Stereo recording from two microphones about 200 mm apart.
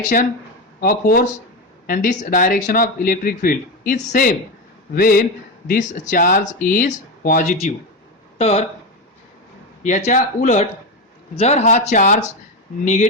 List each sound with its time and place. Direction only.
0.0 s speech: 40° left (ahead or behind)
9.8 s speech: 40° left (ahead or behind)